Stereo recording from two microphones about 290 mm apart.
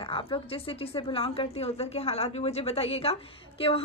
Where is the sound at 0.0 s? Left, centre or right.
Centre.